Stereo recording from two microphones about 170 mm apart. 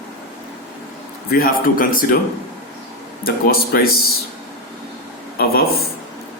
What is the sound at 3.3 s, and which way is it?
Speech, 60° left (ahead or behind).